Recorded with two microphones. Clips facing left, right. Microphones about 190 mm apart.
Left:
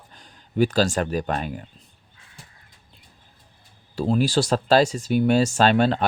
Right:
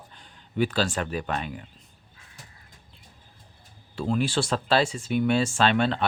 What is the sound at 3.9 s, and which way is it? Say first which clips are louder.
Speech: left 5 dB; 35° left (ahead or behind).